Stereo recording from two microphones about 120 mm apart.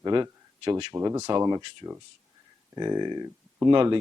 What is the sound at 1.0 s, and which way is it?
Speech, 30° right (ahead or behind).